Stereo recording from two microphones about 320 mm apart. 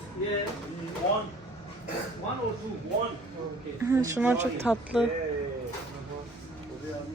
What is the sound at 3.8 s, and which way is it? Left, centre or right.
Speech, centre.